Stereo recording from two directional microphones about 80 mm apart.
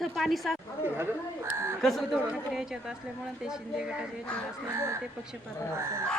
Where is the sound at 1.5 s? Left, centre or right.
Right.